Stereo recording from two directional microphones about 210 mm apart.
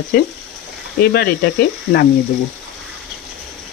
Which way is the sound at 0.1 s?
45° left (ahead or behind).